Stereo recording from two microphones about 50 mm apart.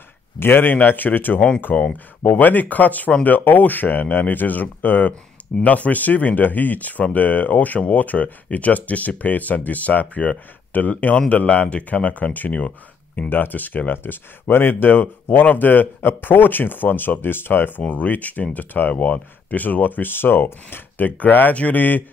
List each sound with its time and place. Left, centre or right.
0.4 s speech: left
1.7 s speech: left
13.3 s speech: left
21.2 s speech: left